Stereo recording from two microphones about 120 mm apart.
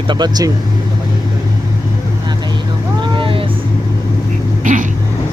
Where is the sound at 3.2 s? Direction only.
45° right (ahead or behind).